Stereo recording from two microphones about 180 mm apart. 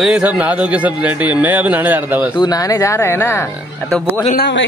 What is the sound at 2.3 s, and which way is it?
Speech, 20° left (ahead or behind).